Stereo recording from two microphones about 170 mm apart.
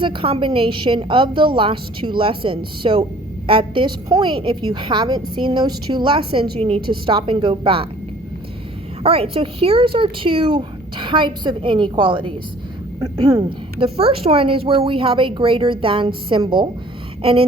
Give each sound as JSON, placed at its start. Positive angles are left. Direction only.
{"t": 0.0, "sound": "a woman's voice", "side_deg": -30}
{"t": 9.0, "sound": "a woman's voice", "side_deg": -35}